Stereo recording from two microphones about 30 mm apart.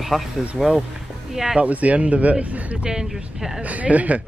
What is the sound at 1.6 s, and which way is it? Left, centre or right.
A man's voice, right.